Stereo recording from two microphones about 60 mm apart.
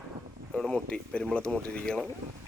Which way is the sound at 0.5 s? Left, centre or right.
Centre.